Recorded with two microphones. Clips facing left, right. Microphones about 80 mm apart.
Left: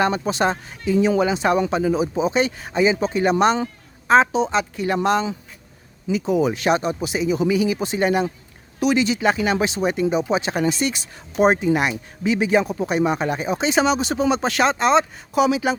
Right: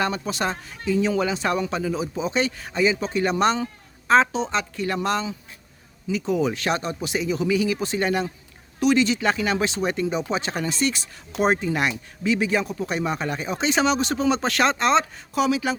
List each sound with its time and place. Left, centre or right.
0.0 s speech: left
6.1 s speech: centre
15.4 s speech: centre